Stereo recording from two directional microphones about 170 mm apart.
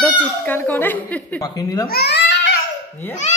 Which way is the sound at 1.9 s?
70° left (ahead or behind).